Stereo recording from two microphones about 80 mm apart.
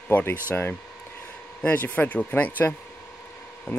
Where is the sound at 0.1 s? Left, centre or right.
Left.